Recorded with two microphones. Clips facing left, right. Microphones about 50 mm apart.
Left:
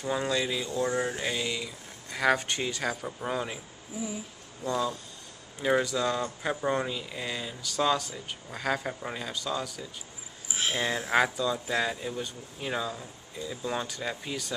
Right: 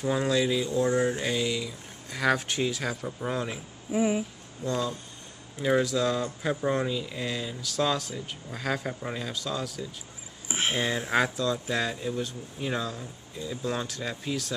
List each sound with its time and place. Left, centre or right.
0.0 s speech: centre
3.9 s a sound: right
4.6 s speech: centre
11.1 s speech: centre